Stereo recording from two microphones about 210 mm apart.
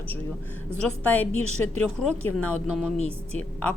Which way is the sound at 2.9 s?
30° right (ahead or behind).